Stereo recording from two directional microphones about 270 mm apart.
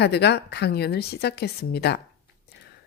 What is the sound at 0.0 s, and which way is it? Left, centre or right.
Speech, left.